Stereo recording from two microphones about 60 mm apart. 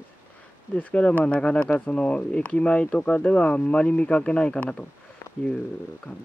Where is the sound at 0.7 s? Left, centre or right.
Centre.